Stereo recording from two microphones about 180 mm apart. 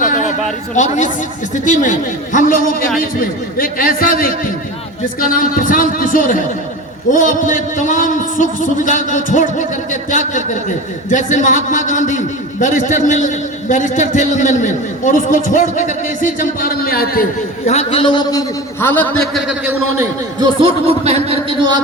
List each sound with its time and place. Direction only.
0.0 s a sound: 45° left (ahead or behind)
0.8 s a man's voice: 40° left (ahead or behind)
17.7 s a man's voice: 35° left (ahead or behind); by 19.1 s 10° left (ahead or behind)
19.3 s a man's voice: 5° right (ahead or behind)
20.6 s speech: 30° right (ahead or behind)